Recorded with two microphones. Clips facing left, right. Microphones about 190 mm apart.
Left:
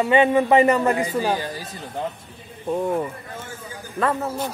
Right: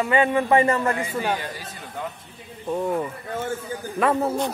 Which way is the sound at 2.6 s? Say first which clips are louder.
Left 2 dB; 10° left (ahead or behind).